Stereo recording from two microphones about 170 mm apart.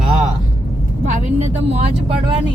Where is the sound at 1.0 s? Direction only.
45° right (ahead or behind).